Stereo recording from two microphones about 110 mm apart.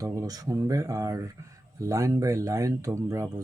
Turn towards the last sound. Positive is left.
turn(degrees=-30)  # may be behind; listen again after turning